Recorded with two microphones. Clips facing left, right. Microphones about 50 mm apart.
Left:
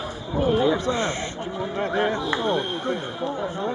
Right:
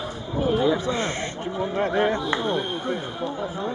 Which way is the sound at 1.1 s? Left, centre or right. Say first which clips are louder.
Right 1 dB; right.